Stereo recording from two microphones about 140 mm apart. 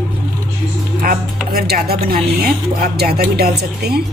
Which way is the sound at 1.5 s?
90° right.